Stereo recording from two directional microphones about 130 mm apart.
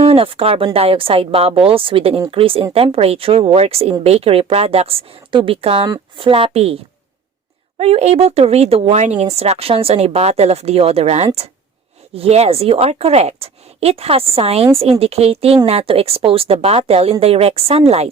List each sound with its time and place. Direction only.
0.0 s speech: 50° right (ahead or behind)
5.8 s speech: 30° right (ahead or behind)
6.2 s speech: 45° right (ahead or behind)
7.8 s speech: 55° right (ahead or behind)